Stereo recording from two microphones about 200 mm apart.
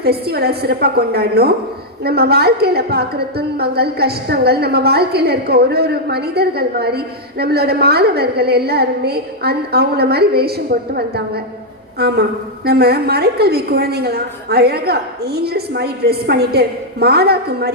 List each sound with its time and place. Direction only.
0.0 s a woman's voice: 55° right (ahead or behind)
11.9 s a woman's voice: 55° right (ahead or behind)